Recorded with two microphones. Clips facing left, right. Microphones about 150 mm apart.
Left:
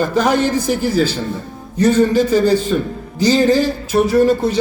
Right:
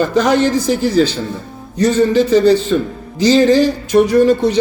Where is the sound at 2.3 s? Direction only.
10° left (ahead or behind).